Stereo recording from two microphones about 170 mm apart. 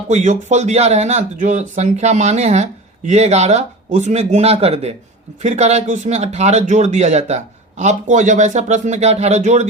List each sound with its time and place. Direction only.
0.1 s speech: 45° right (ahead or behind)